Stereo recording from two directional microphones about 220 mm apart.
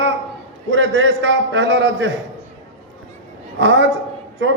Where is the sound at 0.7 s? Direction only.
55° right (ahead or behind).